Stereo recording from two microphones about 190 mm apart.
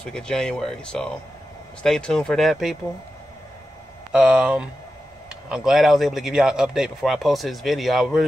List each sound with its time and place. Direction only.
0.0 s a man's voice: 5° left (ahead or behind)
4.1 s a man's voice: 5° right (ahead or behind)